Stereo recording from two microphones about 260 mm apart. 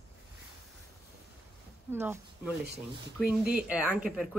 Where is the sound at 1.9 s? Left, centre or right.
Centre.